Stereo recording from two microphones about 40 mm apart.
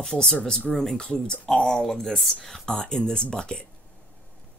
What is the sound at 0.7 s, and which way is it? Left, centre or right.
Speech, centre.